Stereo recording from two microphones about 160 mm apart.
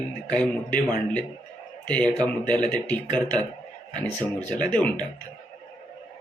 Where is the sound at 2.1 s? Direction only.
10° left (ahead or behind).